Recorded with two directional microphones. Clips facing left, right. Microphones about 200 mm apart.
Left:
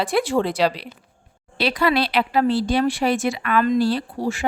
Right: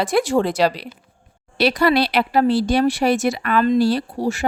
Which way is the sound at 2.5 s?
75° right (ahead or behind).